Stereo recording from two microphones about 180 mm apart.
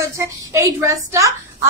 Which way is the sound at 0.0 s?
15° right (ahead or behind).